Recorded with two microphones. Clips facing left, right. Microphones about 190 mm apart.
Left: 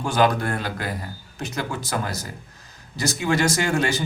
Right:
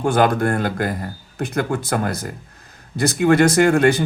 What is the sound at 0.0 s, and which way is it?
A man's voice, 55° right (ahead or behind).